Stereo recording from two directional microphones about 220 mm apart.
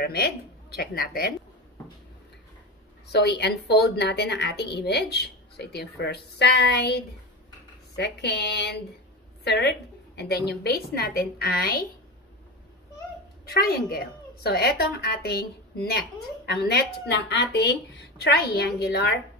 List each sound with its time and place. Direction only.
0.0 s a woman's voice: 45° left (ahead or behind)
3.1 s a woman's voice: 50° left (ahead or behind)
13.5 s a woman's voice: 45° left (ahead or behind)